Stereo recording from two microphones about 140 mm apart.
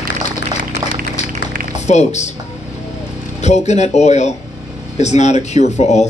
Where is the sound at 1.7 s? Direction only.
55° left (ahead or behind).